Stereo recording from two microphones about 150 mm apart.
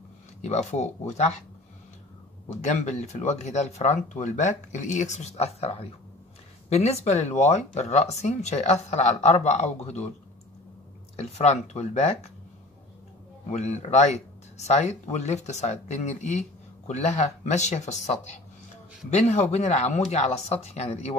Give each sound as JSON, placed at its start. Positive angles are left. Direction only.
{"t": 0.4, "sound": "speech", "side_deg": 50}
{"t": 2.6, "sound": "speech", "side_deg": 50}
{"t": 11.1, "sound": "speech", "side_deg": 50}
{"t": 13.5, "sound": "speech", "side_deg": 50}